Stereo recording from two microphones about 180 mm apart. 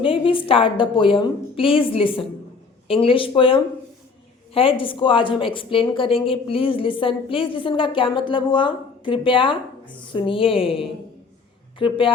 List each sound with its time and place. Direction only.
0.0 s a woman's voice: 30° left (ahead or behind)